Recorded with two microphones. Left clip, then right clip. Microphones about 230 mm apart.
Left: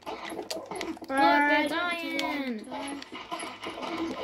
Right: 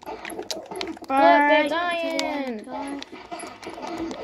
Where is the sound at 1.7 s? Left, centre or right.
Left.